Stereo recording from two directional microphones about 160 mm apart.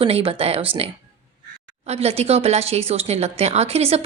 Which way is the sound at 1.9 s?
40° right (ahead or behind).